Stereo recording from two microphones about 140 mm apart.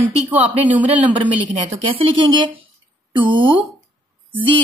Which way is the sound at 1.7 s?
35° right (ahead or behind).